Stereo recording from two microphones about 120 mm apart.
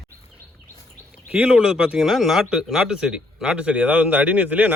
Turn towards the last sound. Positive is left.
turn(degrees=-10)  # may be behind; listen again after turning